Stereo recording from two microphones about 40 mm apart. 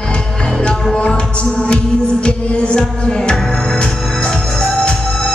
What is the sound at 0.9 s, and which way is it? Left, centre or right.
Music, left.